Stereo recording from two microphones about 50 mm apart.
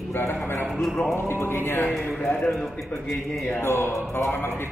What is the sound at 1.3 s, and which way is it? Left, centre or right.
Music, left.